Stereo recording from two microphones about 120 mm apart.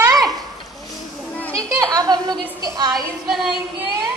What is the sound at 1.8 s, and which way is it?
A woman's voice, 30° right (ahead or behind).